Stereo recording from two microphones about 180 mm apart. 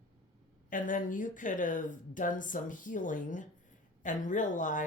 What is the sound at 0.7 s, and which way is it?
Speech, 50° left (ahead or behind).